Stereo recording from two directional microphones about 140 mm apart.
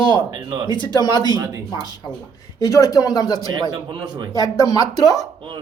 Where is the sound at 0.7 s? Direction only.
35° left (ahead or behind).